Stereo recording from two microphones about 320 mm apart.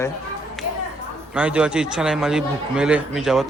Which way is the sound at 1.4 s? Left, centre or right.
Centre.